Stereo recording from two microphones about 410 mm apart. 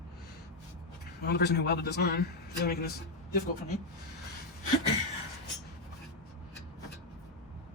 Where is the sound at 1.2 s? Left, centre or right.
Left.